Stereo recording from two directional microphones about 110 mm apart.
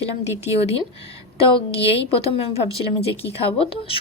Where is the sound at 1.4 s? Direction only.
55° left (ahead or behind).